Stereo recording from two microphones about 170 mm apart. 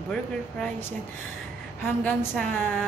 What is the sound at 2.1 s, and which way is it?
Speech, 5° left (ahead or behind).